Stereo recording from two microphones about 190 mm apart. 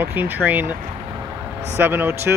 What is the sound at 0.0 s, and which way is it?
Speech, 10° right (ahead or behind).